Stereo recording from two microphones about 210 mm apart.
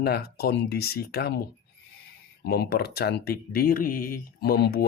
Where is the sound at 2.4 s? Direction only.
50° left (ahead or behind).